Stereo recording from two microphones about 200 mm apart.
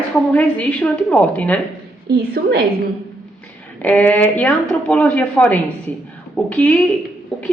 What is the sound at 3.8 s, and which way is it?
A woman's voice, 5° left (ahead or behind).